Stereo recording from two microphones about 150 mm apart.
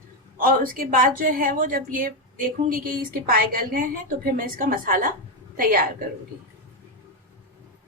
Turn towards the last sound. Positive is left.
turn(degrees=-70)  # may be behind; listen again after turning